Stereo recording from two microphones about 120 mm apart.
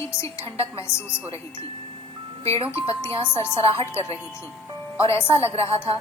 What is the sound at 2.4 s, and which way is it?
Speech, 50° right (ahead or behind).